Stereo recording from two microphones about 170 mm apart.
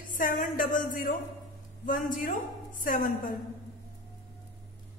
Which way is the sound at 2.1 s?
55° left (ahead or behind).